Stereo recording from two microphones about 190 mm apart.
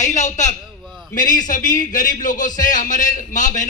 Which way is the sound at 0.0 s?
40° left (ahead or behind).